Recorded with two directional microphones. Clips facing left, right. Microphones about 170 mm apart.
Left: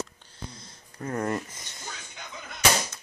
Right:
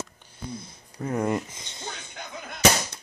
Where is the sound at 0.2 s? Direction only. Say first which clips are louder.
Right 6 dB; 15° right (ahead or behind).